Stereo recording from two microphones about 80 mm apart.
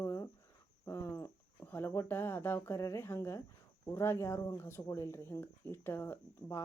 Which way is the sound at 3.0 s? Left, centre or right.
Left.